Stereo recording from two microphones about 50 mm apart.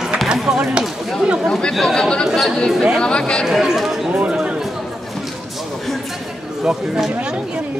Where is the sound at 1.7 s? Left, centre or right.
Centre.